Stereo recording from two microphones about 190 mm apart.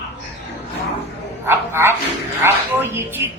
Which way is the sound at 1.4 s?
15° right (ahead or behind).